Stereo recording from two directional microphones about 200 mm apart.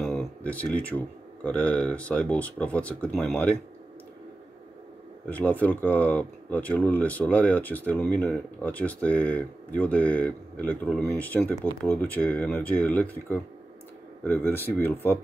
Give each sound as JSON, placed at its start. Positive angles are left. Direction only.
{"t": 0.0, "sound": "speech", "side_deg": 0}
{"t": 5.2, "sound": "speech", "side_deg": 10}